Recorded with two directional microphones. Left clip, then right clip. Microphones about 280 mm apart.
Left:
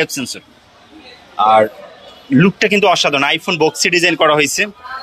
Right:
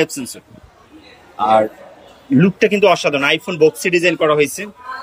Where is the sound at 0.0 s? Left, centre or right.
Centre.